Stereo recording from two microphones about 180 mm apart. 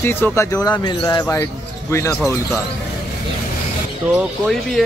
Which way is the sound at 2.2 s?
Centre (ahead or behind).